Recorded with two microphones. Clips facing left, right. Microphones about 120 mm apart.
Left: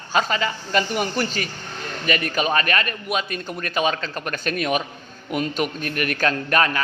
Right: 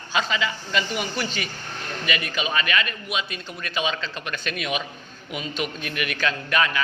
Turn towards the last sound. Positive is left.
turn(degrees=40)  # may be behind; listen again after turning